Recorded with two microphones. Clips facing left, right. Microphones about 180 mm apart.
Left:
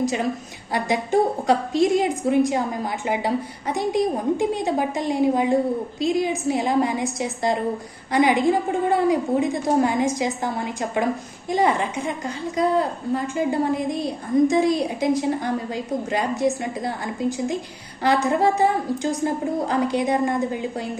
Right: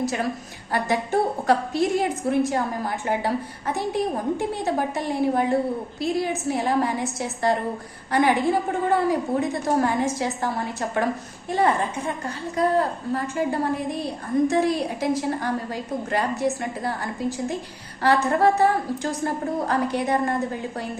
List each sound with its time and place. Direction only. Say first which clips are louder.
0.0 s a woman's voice: left 2 dB; 15° left (ahead or behind)